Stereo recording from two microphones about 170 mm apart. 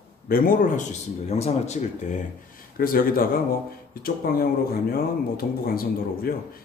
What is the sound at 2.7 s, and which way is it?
Speech, 60° left (ahead or behind).